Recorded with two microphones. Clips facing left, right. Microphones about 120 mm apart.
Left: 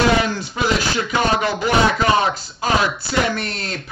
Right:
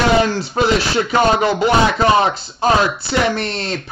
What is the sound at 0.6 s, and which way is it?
Speech, 45° right (ahead or behind).